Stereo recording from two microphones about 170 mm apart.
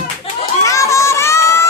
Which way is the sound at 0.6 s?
20° left (ahead or behind).